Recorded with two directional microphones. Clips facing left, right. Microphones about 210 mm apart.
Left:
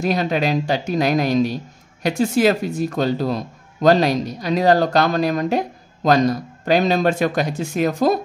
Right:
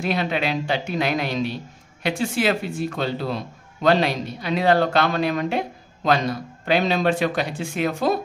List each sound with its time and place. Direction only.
0.0 s speech: 40° left (ahead or behind)